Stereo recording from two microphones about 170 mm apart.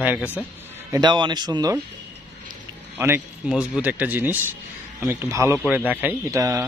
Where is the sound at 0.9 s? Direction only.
25° right (ahead or behind).